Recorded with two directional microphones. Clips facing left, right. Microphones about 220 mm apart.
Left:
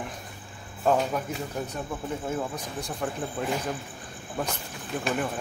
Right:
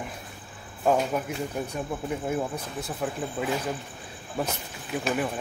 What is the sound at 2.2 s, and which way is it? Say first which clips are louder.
Speech: right 2 dB; 10° right (ahead or behind).